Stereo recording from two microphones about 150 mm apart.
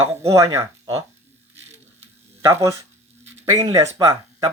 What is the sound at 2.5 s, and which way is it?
Speech, 20° right (ahead or behind).